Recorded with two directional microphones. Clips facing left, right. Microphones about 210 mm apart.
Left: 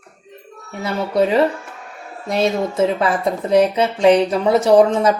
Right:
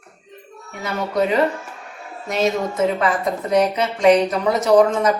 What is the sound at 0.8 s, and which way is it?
A woman's voice, 30° left (ahead or behind).